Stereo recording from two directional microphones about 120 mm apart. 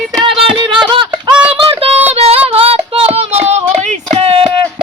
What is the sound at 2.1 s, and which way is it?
Female singing, 55° right (ahead or behind).